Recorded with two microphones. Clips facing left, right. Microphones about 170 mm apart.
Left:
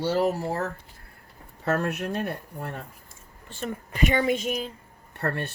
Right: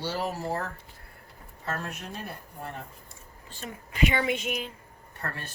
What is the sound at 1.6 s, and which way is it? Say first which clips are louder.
Speech: left 9 dB; 65° left (ahead or behind).